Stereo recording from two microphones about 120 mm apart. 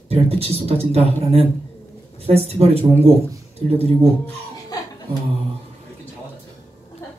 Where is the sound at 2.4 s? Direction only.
55° right (ahead or behind).